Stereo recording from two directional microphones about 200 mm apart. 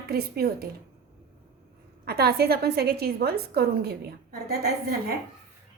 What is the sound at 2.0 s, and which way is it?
A woman's voice, 50° right (ahead or behind).